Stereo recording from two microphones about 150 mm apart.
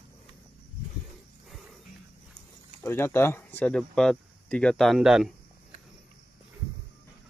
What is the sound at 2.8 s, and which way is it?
Speech, 15° left (ahead or behind).